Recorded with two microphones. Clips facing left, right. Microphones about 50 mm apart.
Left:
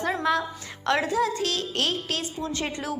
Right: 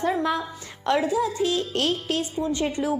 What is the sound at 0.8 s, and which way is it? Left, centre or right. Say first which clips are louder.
Speech: right 1 dB; left.